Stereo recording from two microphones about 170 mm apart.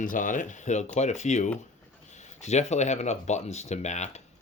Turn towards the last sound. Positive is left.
turn(degrees=45)  # may be behind; listen again after turning